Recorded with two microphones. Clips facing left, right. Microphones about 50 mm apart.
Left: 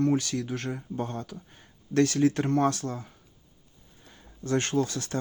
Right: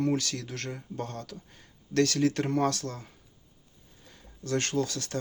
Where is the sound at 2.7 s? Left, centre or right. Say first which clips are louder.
Left 3 dB; centre.